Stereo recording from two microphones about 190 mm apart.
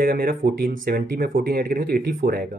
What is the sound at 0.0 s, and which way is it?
Speech, 50° right (ahead or behind).